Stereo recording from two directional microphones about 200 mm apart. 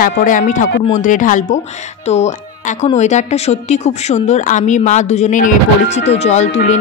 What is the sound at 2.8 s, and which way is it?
Speech, 35° left (ahead or behind).